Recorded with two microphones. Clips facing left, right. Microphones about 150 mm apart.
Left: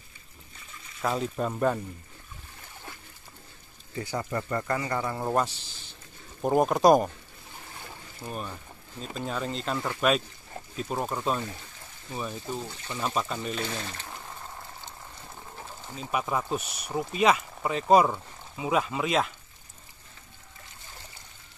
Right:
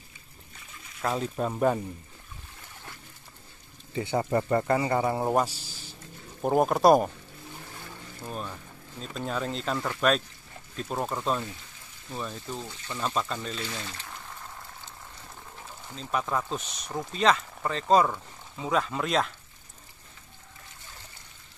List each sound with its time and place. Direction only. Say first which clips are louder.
1.0 s speech: even; centre (ahead or behind)
3.9 s speech: right 5 dB; 25° right (ahead or behind)
5.3 s speech: right 1 dB; 10° right (ahead or behind)
8.2 s speech: even; 5° left (ahead or behind)
15.9 s speech: even; 10° left (ahead or behind)